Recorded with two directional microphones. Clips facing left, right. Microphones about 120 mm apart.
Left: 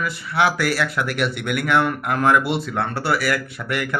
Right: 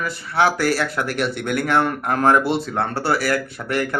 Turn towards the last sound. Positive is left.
turn(degrees=-35)  # may be behind; listen again after turning